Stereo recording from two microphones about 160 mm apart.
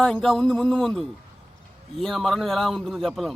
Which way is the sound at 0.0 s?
5° left (ahead or behind).